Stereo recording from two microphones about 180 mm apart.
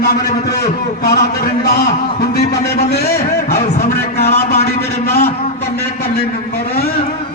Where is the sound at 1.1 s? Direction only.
60° left (ahead or behind).